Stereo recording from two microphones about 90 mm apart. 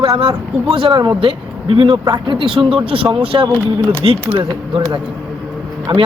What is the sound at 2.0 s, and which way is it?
Speech, 55° right (ahead or behind).